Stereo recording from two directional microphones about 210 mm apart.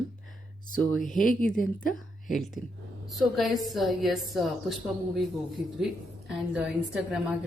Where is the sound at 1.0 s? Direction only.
40° left (ahead or behind).